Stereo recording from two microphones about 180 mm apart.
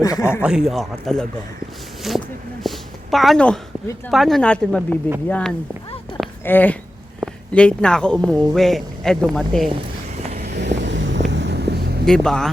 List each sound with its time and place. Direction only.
0.0 s speech: 20° left (ahead or behind)
0.4 s speech: 5° right (ahead or behind)
2.6 s a sound: centre (ahead or behind)
4.1 s speech: centre (ahead or behind)
10.3 s vehicle: 50° right (ahead or behind)
10.6 s vehicle: 80° right; by 12.0 s 60° right (ahead or behind)
12.0 s speech: 5° left (ahead or behind)